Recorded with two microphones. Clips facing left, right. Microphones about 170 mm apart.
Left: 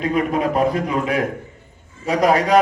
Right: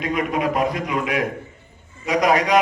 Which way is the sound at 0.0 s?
35° left (ahead or behind).